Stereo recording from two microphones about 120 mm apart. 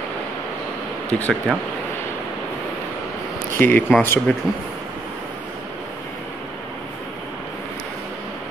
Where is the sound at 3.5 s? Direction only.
15° left (ahead or behind).